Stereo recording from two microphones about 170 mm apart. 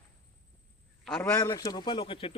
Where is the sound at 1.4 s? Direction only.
20° left (ahead or behind).